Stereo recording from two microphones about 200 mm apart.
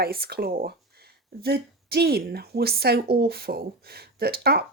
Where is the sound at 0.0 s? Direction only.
50° right (ahead or behind).